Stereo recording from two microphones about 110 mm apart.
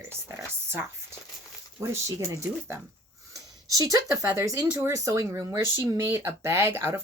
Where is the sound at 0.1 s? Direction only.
25° right (ahead or behind).